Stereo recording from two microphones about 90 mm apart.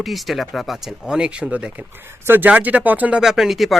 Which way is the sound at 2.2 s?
20° right (ahead or behind).